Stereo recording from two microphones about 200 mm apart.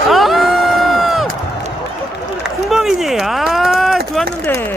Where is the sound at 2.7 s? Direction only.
Centre (ahead or behind).